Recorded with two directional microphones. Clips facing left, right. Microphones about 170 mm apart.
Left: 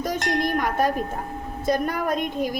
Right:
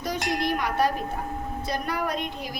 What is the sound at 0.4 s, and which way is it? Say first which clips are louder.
Tubular bells: even; 50° left (ahead or behind).